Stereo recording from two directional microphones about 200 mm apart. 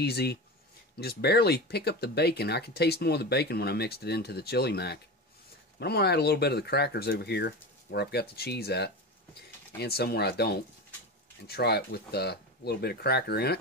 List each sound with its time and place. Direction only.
0.0 s speech: 55° left (ahead or behind)